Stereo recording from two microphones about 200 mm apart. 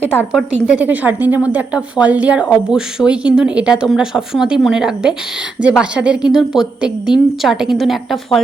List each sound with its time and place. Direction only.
0.3 s a woman's voice: 5° right (ahead or behind)